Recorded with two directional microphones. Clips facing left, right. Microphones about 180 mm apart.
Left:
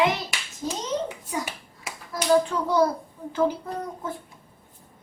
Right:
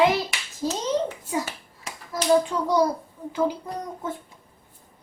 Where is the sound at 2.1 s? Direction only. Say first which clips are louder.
Right 1 dB; 15° right (ahead or behind).